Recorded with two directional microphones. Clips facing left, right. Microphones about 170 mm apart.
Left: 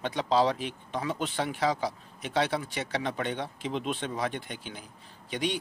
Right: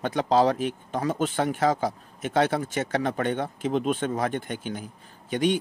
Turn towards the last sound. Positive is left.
turn(degrees=-50)  # may be behind; listen again after turning